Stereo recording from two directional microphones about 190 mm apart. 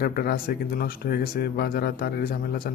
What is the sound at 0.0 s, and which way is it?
Speech, 50° left (ahead or behind).